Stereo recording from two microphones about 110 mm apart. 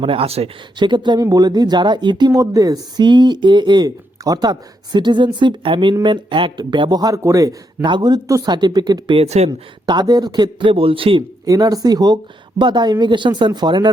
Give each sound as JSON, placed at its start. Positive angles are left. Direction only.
{"t": 0.0, "sound": "speech", "side_deg": -55}
{"t": 0.8, "sound": "a man's voice", "side_deg": -45}
{"t": 9.1, "sound": "speech", "side_deg": -75}
{"t": 9.5, "sound": "a man's voice", "side_deg": -40}
{"t": 11.4, "sound": "speech", "side_deg": -35}